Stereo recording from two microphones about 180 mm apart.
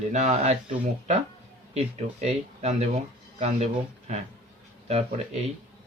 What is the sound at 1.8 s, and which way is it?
Speech, 35° right (ahead or behind).